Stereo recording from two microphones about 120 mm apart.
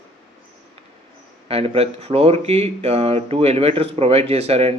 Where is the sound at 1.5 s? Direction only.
55° right (ahead or behind).